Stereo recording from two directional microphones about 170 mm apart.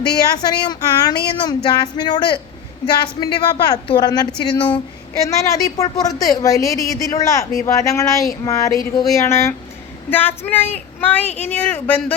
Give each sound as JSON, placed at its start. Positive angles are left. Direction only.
{"t": 0.2, "sound": "a woman's voice", "side_deg": 25}